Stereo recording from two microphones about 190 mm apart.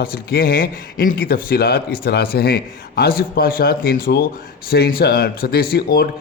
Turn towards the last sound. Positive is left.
turn(degrees=50)  # may be behind; listen again after turning